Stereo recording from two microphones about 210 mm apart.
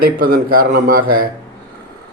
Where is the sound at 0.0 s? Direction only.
45° right (ahead or behind).